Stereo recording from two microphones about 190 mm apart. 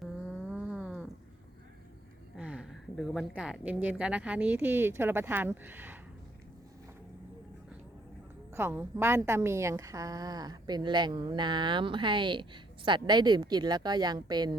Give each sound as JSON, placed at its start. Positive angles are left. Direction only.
{"t": 0.5, "sound": "a sound", "side_deg": -5}
{"t": 2.3, "sound": "a woman's voice", "side_deg": -5}
{"t": 8.5, "sound": "a woman's voice", "side_deg": -10}